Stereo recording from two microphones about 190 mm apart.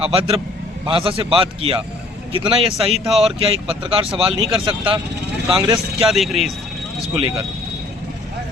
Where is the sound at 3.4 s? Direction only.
30° right (ahead or behind).